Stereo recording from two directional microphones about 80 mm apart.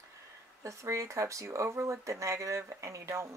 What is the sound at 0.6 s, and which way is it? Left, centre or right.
Speech, right.